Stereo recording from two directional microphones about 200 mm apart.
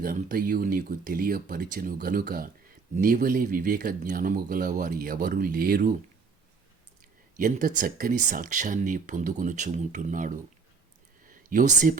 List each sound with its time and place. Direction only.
0.0 s speech: 45° right (ahead or behind)
7.3 s speech: 45° right (ahead or behind)